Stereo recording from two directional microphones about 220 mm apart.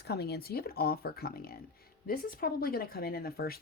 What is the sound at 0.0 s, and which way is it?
Speech, 50° left (ahead or behind).